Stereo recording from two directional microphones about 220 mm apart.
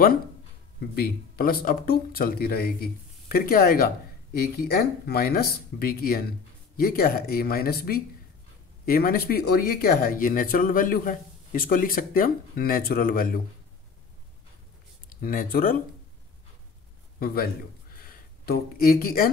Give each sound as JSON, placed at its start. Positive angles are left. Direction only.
{"t": 0.9, "sound": "speech", "side_deg": 45}
{"t": 15.2, "sound": "speech", "side_deg": 40}
{"t": 17.2, "sound": "a man's voice", "side_deg": 45}